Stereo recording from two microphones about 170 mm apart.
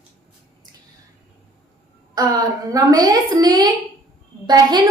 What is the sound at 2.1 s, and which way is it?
A woman's voice, 20° right (ahead or behind).